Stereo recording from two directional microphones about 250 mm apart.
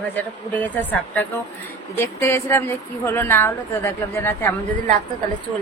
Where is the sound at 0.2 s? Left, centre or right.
Centre.